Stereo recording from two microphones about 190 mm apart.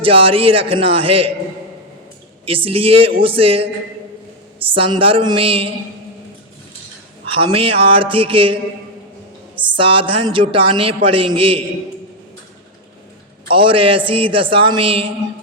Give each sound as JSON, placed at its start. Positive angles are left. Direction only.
{"t": 0.0, "sound": "a man's voice", "side_deg": -30}
{"t": 2.5, "sound": "a man's voice", "side_deg": -30}
{"t": 4.7, "sound": "a man's voice", "side_deg": -30}
{"t": 7.3, "sound": "a man's voice", "side_deg": -30}
{"t": 9.7, "sound": "a man's voice", "side_deg": -30}
{"t": 13.5, "sound": "a man's voice", "side_deg": -25}